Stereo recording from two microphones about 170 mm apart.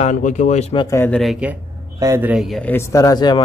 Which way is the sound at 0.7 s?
15° left (ahead or behind).